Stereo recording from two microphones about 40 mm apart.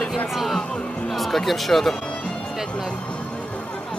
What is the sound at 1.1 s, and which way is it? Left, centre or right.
Speech, centre.